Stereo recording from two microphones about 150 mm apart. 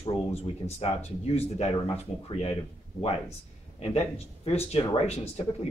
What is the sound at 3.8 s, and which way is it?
Speech, 45° left (ahead or behind).